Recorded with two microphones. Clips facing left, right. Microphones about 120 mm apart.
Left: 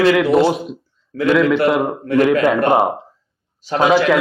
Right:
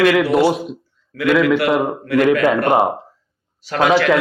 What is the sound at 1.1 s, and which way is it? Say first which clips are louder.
Speech: left 2 dB; 30° left (ahead or behind).